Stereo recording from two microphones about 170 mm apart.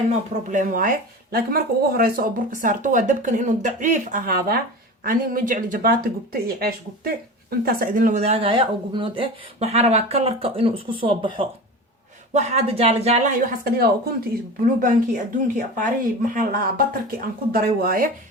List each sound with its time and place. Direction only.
0.5 s speech: 50° right (ahead or behind)
13.7 s speech: 65° right (ahead or behind)
14.8 s speech: 50° right (ahead or behind)